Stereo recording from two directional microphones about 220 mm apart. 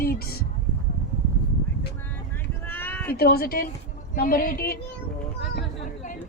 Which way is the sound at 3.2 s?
45° left (ahead or behind).